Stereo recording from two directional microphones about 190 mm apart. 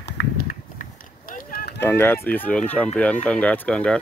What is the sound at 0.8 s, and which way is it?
Run, 45° left (ahead or behind).